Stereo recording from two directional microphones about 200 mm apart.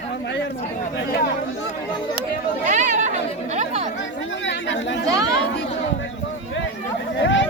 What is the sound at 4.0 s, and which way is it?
Chatter, 70° left (ahead or behind).